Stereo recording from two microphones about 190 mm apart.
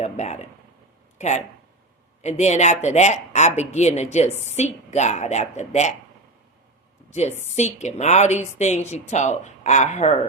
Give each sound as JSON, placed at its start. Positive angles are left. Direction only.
{"t": 0.0, "sound": "speech", "side_deg": 35}
{"t": 7.1, "sound": "a woman's voice", "side_deg": 35}